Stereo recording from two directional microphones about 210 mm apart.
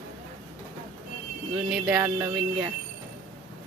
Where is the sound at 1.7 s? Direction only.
5° right (ahead or behind).